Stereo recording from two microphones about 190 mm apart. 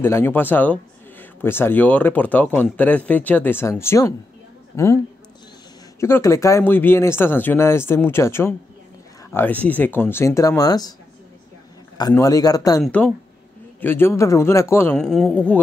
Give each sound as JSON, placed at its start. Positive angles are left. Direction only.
{"t": 0.0, "sound": "speech", "side_deg": 10}
{"t": 12.1, "sound": "a man's voice", "side_deg": 15}
{"t": 12.8, "sound": "speech", "side_deg": 5}